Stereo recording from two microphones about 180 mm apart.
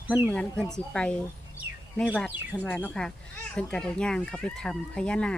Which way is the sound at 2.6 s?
5° left (ahead or behind).